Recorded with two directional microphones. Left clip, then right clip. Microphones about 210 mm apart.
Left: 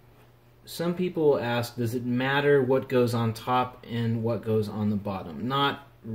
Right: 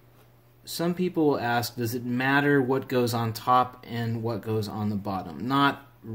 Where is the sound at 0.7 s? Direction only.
50° right (ahead or behind).